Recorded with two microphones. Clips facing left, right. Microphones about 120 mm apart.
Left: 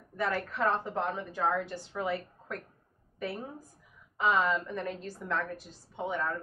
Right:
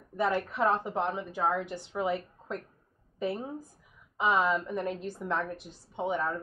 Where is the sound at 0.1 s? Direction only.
20° right (ahead or behind).